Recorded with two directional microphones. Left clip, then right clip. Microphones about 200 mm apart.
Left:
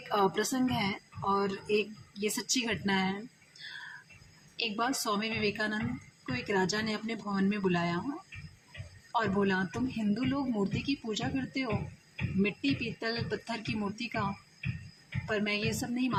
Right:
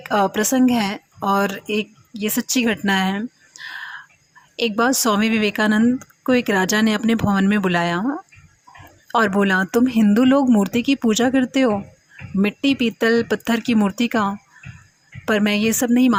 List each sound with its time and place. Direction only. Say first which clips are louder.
0.1 s a woman's voice: right 11 dB; 45° right (ahead or behind)
9.1 s a woman's voice: right 13 dB; 45° right (ahead or behind)